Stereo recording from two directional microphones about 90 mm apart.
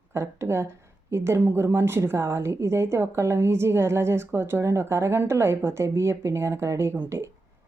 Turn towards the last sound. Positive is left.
turn(degrees=-30)  # may be behind; listen again after turning